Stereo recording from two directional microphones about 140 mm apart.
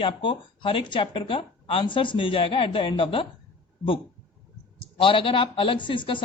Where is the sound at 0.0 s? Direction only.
35° left (ahead or behind).